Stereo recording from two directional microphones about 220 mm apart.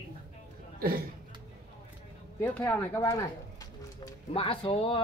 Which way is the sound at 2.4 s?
5° left (ahead or behind).